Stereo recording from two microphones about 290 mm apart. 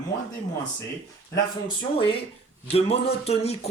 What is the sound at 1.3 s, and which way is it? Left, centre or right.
Speech, centre.